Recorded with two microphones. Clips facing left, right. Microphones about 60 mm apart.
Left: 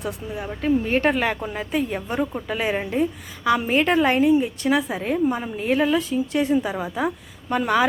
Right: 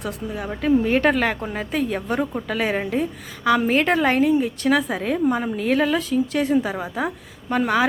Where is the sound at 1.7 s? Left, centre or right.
Right.